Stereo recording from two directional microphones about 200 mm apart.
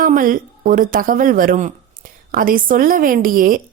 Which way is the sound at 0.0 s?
45° right (ahead or behind).